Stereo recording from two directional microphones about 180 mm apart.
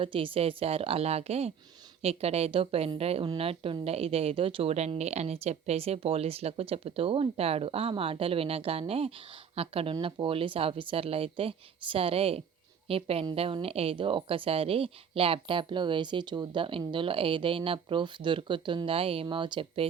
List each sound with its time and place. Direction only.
0.0 s a woman's voice: 30° right (ahead or behind)